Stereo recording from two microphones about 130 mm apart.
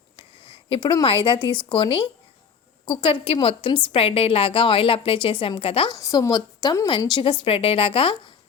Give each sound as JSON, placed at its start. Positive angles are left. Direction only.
{"t": 0.7, "sound": "a woman's voice", "side_deg": 45}
{"t": 5.9, "sound": "a woman's voice", "side_deg": 30}